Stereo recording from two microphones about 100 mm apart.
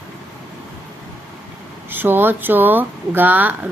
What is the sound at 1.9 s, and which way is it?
Speech, 20° right (ahead or behind).